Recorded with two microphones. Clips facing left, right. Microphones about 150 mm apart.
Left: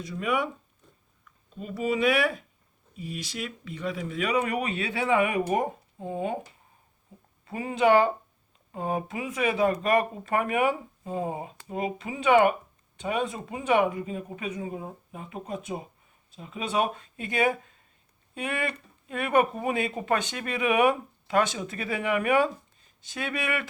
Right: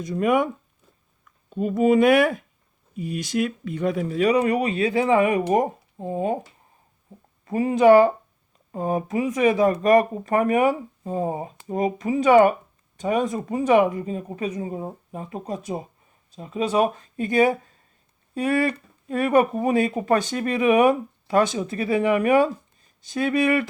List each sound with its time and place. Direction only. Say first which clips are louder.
0.0 s speech: right 8 dB; 45° right (ahead or behind)
7.4 s speech: right 7 dB; 40° right (ahead or behind)